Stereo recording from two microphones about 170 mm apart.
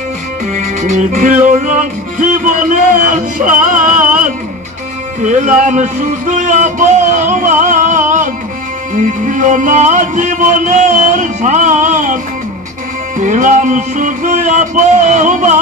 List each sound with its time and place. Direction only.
0.6 s music: 45° right (ahead or behind)
5.2 s speech: 45° right (ahead or behind)
8.9 s music: 50° right (ahead or behind)
13.2 s music: 50° right (ahead or behind)